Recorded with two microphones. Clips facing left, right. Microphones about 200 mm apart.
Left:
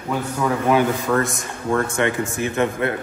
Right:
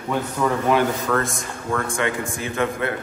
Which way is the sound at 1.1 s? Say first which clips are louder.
Left 2 dB; 15° left (ahead or behind).